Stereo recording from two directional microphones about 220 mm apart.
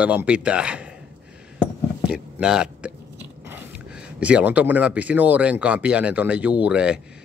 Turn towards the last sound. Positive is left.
turn(degrees=-5)  # may be behind; listen again after turning